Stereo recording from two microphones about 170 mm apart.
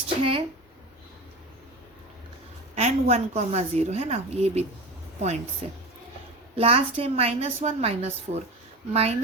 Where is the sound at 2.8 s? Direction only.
40° right (ahead or behind).